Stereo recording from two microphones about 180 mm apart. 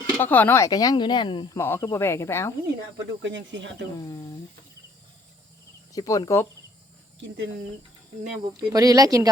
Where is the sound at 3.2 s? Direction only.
90° right.